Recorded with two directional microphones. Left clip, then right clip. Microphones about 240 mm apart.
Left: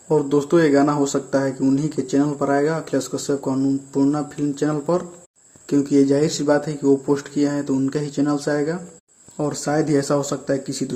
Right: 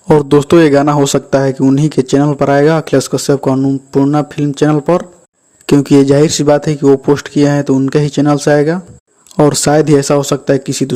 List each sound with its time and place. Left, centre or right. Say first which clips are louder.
0.3 s speech: right 8 dB; right